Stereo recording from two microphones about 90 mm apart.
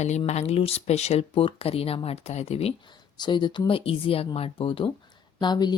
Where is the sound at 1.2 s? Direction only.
90° left.